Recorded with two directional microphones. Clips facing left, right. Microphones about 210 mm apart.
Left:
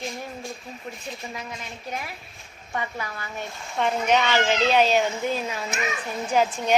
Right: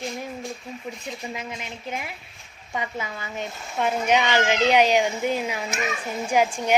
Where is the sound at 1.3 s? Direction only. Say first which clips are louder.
Right 2 dB; 20° right (ahead or behind).